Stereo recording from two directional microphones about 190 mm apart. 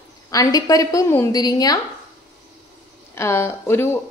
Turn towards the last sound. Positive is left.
turn(degrees=10)  # may be behind; listen again after turning